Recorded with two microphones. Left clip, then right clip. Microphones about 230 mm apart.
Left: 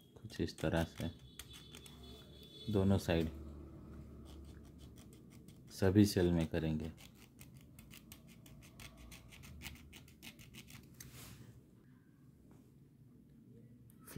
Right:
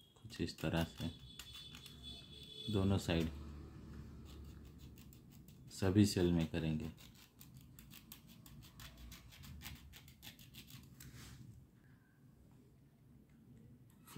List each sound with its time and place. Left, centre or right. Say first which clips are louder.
0.3 s speech: left 3 dB; centre
2.7 s speech: left 4 dB; centre
5.7 s speech: left 3 dB; centre